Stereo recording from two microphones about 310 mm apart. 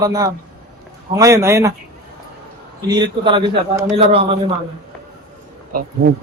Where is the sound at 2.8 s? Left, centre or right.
Centre.